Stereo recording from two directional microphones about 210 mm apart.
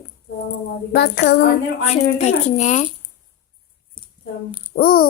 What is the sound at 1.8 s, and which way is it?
Speech, 30° left (ahead or behind).